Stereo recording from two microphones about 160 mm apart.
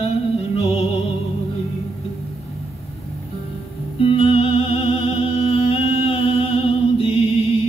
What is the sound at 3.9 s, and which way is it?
Music, 35° left (ahead or behind).